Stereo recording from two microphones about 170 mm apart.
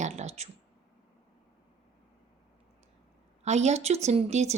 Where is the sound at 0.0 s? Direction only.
40° right (ahead or behind).